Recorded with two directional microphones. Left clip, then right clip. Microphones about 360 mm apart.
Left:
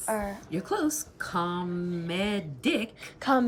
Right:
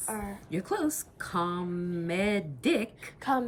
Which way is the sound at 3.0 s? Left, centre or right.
Left.